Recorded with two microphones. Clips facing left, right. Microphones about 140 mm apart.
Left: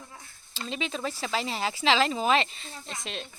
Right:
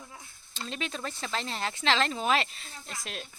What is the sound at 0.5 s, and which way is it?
Speech, centre (ahead or behind).